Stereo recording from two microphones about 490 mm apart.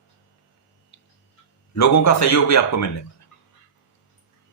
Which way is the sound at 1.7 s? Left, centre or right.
Left.